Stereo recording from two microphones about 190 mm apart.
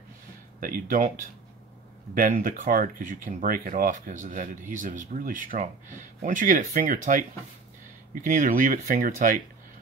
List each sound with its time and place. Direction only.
0.6 s speech: 50° right (ahead or behind)